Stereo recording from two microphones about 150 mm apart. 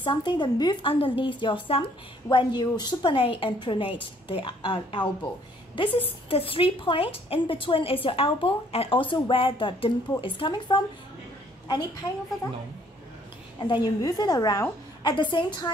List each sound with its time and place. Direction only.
0.0 s a woman's voice: 30° left (ahead or behind)
13.6 s a woman's voice: 30° left (ahead or behind)